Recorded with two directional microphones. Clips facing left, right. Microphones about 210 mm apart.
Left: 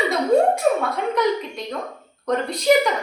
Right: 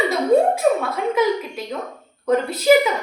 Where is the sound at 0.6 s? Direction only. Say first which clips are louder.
Right 1 dB; centre (ahead or behind).